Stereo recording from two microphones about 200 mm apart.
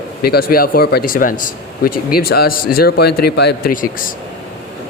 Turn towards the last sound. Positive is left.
turn(degrees=45)  # may be behind; listen again after turning